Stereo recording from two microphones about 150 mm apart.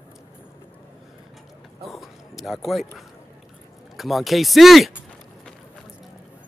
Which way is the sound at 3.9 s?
Centre (ahead or behind).